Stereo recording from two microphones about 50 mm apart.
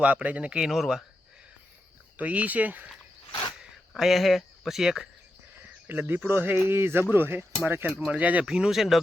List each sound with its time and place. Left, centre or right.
0.0 s speech: right
0.5 s speech: centre
2.1 s speech: right
3.9 s speech: centre
5.9 s speech: right
8.0 s speech: right
8.4 s speech: centre